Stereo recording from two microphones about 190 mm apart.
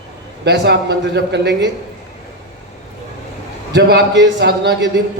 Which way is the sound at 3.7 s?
60° right (ahead or behind).